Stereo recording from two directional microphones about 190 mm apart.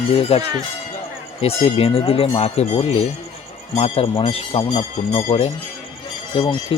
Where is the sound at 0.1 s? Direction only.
30° left (ahead or behind).